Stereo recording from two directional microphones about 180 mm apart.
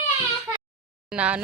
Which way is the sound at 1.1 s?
5° right (ahead or behind).